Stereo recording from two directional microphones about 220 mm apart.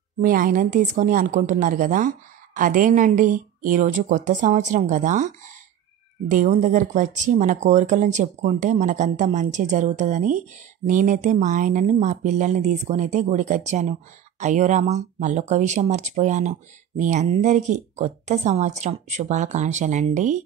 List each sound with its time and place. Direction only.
0.2 s speech: 40° right (ahead or behind)